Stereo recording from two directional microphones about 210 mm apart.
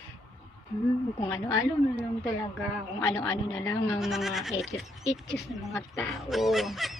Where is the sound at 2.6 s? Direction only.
15° left (ahead or behind).